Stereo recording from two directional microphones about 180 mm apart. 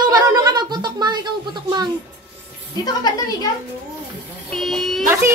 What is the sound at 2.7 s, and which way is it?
Speech, 20° left (ahead or behind).